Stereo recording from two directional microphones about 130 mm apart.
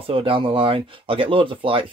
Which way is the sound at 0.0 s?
45° right (ahead or behind).